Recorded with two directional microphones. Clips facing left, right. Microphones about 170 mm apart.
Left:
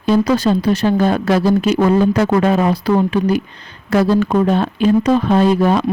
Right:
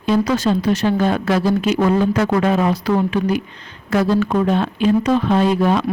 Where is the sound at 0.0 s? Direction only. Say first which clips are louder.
Left 3 dB; 35° left (ahead or behind).